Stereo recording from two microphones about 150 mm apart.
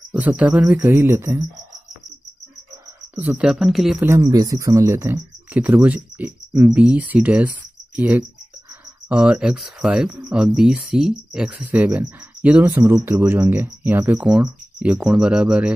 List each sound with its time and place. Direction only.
0.1 s speech: 10° right (ahead or behind)
3.2 s speech: 10° right (ahead or behind)
4.0 s speech: 20° right (ahead or behind)